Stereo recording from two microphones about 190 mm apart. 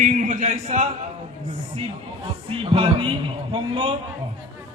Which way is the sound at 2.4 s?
30° right (ahead or behind).